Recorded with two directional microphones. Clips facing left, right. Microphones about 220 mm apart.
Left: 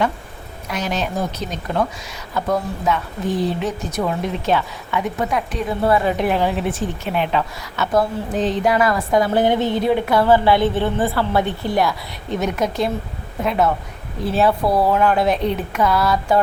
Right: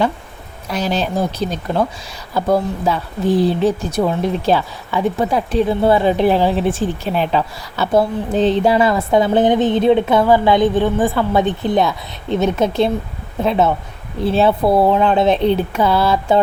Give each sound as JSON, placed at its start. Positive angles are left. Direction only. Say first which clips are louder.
{"t": 0.7, "sound": "speech", "louder": "right 4 dB", "side_deg": -30}